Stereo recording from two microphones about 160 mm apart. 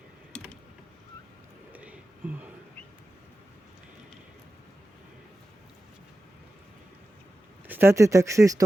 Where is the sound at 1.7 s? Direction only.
10° right (ahead or behind).